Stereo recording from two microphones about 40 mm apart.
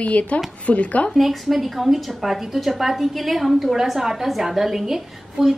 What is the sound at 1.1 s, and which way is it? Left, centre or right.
A woman's voice, centre.